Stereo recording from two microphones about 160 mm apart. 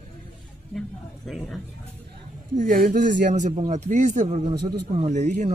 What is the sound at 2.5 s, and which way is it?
Speech, 60° right (ahead or behind).